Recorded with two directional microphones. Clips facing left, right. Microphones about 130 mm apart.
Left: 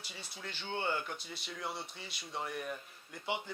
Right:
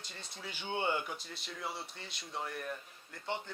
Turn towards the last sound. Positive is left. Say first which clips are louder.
# left 1 dB
turn(degrees=10)  # may be behind; listen again after turning